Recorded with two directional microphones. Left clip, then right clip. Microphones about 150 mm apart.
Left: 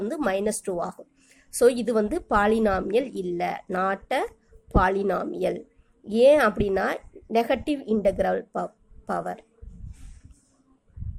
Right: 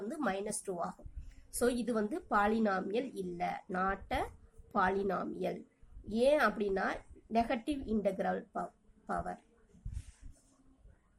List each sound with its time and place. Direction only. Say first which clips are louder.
0.1 s a woman's voice: left 10 dB; 40° left (ahead or behind)